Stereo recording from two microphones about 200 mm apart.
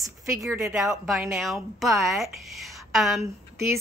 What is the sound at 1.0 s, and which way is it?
Speech, centre (ahead or behind).